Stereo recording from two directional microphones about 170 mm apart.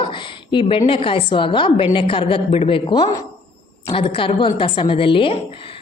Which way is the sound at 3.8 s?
30° left (ahead or behind).